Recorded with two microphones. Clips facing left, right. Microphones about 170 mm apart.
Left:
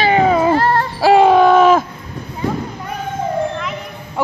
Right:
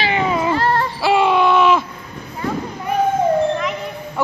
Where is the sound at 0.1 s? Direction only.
40° left (ahead or behind).